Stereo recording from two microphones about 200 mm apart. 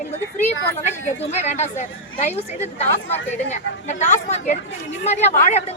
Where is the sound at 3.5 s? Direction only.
35° left (ahead or behind).